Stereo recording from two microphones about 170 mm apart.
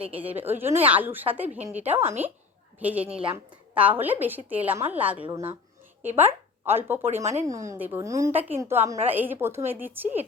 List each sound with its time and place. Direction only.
0.2 s a woman's voice: 10° right (ahead or behind)
3.1 s speech: 35° right (ahead or behind)
3.8 s a woman's voice: 10° right (ahead or behind)